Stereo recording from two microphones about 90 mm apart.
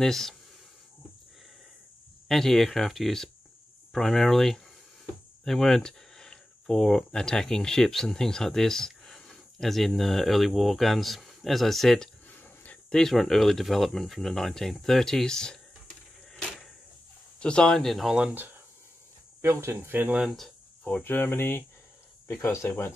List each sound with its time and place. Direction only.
0.0 s speech: 5° left (ahead or behind)
2.2 s speech: 5° left (ahead or behind)
16.3 s a sound: 5° left (ahead or behind)
17.4 s speech: 10° left (ahead or behind); by 18.3 s 5° right (ahead or behind)
18.3 s speech: 20° right (ahead or behind)
19.4 s speech: 30° right (ahead or behind)
20.2 s speech: 5° left (ahead or behind)
20.8 s speech: 20° left (ahead or behind)